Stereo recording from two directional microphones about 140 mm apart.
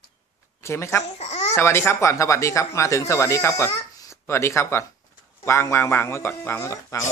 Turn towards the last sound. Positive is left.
turn(degrees=20)  # may be behind; listen again after turning